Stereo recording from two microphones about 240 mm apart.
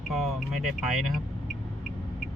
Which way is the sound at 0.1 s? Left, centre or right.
Centre.